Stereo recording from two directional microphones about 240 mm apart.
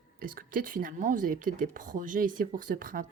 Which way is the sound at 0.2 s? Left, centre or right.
Right.